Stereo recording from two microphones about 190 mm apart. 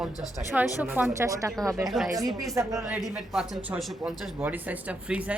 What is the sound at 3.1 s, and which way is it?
A woman's voice, centre (ahead or behind).